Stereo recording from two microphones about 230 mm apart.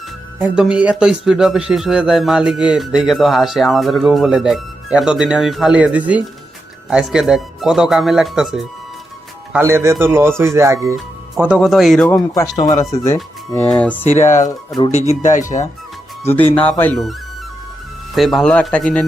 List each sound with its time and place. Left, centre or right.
0.3 s a man's voice: centre
14.2 s speech: left
16.2 s a man's voice: centre